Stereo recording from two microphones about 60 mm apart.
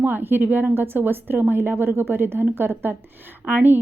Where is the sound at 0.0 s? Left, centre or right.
Right.